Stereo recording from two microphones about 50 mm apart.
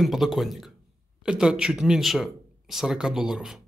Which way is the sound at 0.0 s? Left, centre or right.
Centre.